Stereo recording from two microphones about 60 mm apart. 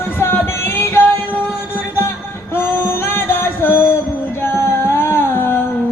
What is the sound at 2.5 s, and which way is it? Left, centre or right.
Music, left.